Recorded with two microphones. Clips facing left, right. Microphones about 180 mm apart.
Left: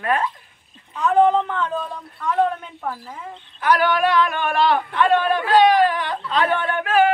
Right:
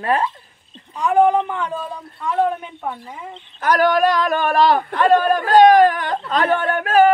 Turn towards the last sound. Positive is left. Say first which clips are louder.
# right 4 dB
turn(degrees=-40)  # may be behind; listen again after turning